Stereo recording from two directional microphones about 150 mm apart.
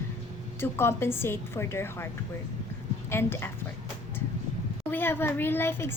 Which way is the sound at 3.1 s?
15° left (ahead or behind).